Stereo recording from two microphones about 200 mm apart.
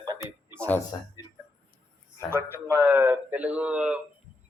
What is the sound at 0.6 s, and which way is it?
Speech, 10° left (ahead or behind).